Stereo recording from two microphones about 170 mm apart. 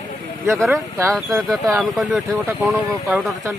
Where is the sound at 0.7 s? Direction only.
20° right (ahead or behind).